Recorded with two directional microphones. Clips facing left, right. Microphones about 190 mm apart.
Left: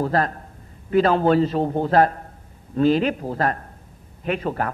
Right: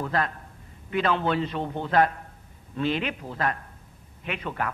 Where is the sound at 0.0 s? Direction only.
40° left (ahead or behind).